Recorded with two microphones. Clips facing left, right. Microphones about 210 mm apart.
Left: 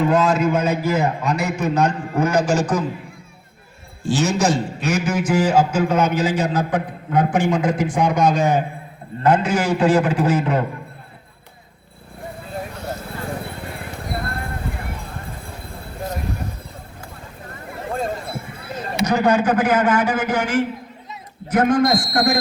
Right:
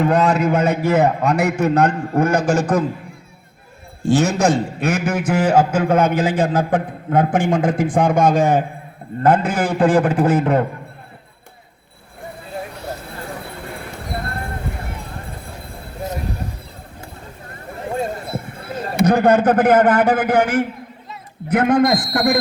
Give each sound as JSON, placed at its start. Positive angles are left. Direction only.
{"t": 0.1, "sound": "a man's voice", "side_deg": -65}
{"t": 4.1, "sound": "a man's voice", "side_deg": -55}
{"t": 18.6, "sound": "a man's voice", "side_deg": -50}